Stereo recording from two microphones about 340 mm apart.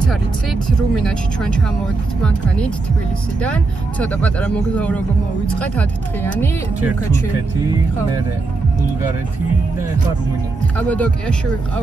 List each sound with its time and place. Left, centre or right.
0.1 s speech: centre
3.3 s speech: centre
10.8 s speech: centre